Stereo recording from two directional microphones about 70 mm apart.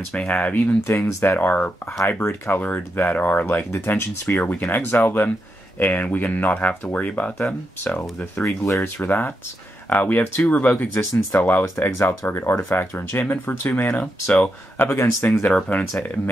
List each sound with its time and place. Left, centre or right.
0.1 s speech: centre
0.8 s speech: left
1.4 s speech: left
8.4 s speech: left
8.9 s speech: left
11.6 s speech: left
12.5 s speech: left
13.2 s speech: left
14.8 s speech: left
15.7 s speech: left